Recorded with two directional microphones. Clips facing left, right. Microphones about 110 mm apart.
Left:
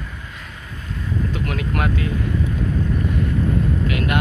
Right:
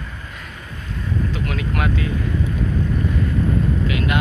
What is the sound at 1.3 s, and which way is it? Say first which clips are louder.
Speech: even; 45° left (ahead or behind).